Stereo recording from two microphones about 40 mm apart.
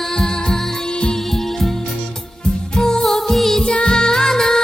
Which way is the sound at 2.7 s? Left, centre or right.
Centre.